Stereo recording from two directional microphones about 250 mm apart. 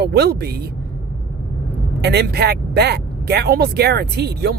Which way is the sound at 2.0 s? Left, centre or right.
Right.